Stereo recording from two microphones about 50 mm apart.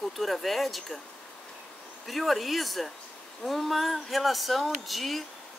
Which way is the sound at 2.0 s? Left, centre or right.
Centre.